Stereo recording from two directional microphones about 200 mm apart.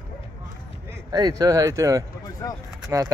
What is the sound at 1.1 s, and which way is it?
Speech, 20° right (ahead or behind).